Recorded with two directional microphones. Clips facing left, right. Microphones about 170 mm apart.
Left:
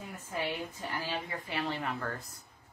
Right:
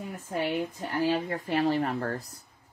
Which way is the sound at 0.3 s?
40° right (ahead or behind).